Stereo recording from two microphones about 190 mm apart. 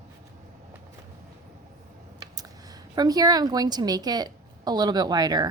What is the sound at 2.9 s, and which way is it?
A woman's voice, 20° right (ahead or behind).